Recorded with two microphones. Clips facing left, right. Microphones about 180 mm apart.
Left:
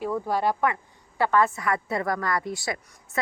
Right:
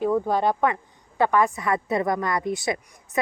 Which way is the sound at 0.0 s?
20° right (ahead or behind).